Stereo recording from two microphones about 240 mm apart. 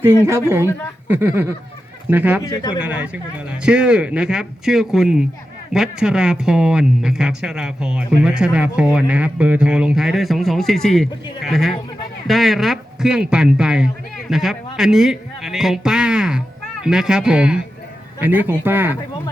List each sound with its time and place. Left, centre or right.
0.0 s speech: centre
2.4 s speech: centre
2.8 s a man's voice: centre